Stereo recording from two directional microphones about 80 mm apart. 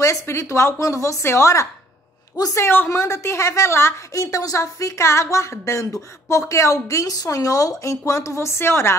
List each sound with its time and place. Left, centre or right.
0.0 s a woman's voice: left
2.3 s a woman's voice: left
2.6 s a woman's voice: left
2.9 s a woman's voice: left
4.1 s a woman's voice: left